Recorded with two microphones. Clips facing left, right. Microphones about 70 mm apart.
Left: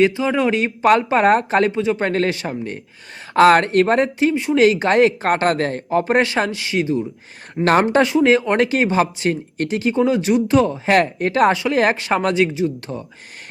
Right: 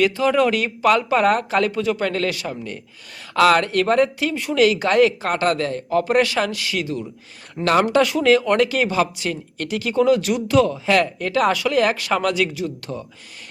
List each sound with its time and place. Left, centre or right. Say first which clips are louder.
0.0 s speech: left 1 dB; centre
1.7 s speech: left 2 dB; left
7.6 s speech: left 2 dB; left